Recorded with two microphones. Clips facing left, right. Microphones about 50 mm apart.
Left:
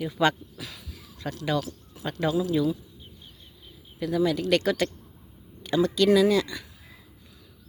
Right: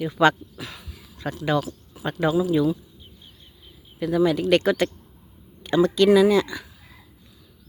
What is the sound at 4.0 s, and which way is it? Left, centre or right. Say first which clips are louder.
Speech: right 4 dB; right.